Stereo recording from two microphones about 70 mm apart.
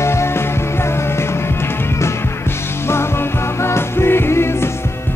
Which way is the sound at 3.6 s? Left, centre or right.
Left.